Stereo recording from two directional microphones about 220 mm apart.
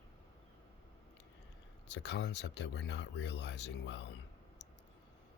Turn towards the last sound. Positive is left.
turn(degrees=50)  # may be behind; listen again after turning